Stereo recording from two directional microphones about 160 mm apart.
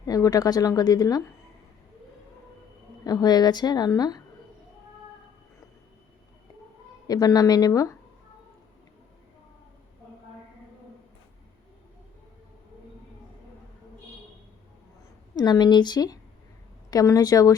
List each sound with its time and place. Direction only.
0.0 s speech: 25° left (ahead or behind)
3.0 s speech: 25° left (ahead or behind)
7.1 s speech: 25° left (ahead or behind)
15.4 s speech: 25° left (ahead or behind)